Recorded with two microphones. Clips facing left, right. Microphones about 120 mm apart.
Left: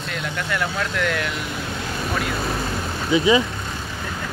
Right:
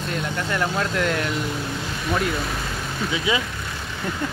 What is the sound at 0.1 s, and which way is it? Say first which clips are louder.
Speech: even; 35° right (ahead or behind).